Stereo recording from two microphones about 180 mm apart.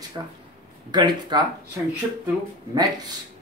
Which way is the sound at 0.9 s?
25° right (ahead or behind).